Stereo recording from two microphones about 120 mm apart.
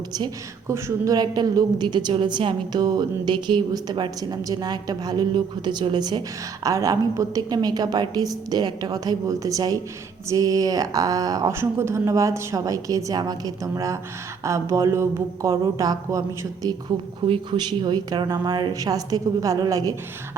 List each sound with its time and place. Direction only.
0.7 s a woman's voice: 25° right (ahead or behind)
17.2 s a woman's voice: 45° right (ahead or behind); by 19.9 s 30° right (ahead or behind)